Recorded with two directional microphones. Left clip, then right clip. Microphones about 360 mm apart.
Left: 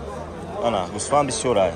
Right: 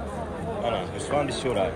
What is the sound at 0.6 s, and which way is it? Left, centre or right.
Speech, centre.